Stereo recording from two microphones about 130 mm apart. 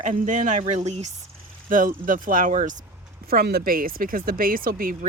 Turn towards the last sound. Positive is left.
turn(degrees=-90)